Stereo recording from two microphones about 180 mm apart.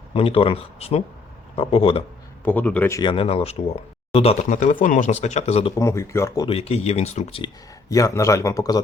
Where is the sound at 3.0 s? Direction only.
30° left (ahead or behind).